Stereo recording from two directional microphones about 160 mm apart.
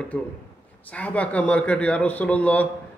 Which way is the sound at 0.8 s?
10° left (ahead or behind).